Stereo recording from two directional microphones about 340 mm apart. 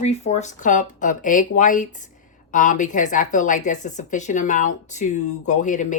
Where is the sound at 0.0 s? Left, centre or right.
Centre.